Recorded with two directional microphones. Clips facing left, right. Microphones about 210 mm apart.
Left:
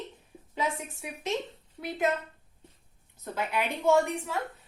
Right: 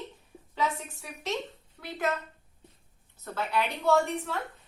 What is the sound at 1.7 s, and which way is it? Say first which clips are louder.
Speech: left 3 dB; 20° left (ahead or behind).